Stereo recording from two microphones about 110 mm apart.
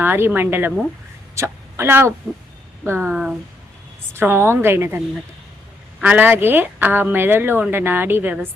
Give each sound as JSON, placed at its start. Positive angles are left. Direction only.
{"t": 0.0, "sound": "speech", "side_deg": -20}
{"t": 3.1, "sound": "speech", "side_deg": -10}
{"t": 4.1, "sound": "speech", "side_deg": -20}
{"t": 6.0, "sound": "speech", "side_deg": -15}